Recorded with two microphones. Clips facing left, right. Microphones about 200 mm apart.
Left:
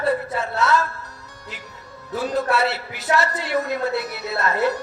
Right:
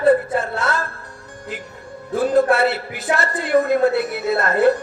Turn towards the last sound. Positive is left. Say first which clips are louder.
# right 6 dB
turn(degrees=-50)  # may be behind; listen again after turning